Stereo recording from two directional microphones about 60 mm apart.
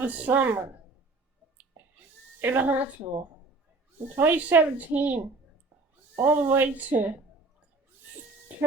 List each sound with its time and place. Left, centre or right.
0.0 s speech: right
2.4 s a woman's voice: right
4.4 s a woman's voice: right
8.5 s music: right